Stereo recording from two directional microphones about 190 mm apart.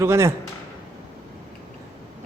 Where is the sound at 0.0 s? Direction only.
15° right (ahead or behind).